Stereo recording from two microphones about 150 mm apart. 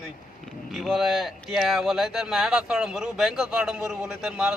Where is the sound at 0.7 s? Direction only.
Centre (ahead or behind).